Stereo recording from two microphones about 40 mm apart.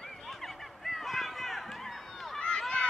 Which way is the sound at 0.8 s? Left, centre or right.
Centre.